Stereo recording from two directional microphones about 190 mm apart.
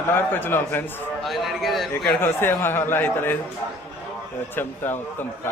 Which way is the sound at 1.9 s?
10° left (ahead or behind).